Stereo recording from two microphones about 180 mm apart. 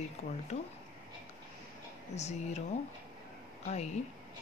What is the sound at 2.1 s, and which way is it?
Speech, 40° left (ahead or behind).